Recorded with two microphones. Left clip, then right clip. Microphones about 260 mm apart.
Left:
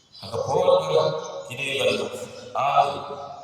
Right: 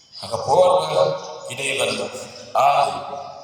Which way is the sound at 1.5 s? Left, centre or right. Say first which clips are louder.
Right 4 dB; right.